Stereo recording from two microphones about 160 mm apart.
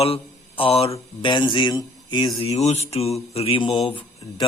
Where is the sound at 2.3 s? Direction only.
40° left (ahead or behind).